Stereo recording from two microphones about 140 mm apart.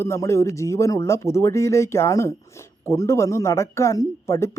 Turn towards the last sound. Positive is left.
turn(degrees=20)  # may be behind; listen again after turning